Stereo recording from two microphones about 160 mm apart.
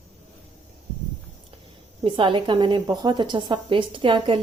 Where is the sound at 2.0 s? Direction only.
30° right (ahead or behind).